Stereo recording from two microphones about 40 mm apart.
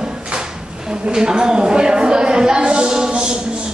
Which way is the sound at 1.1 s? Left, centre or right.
Right.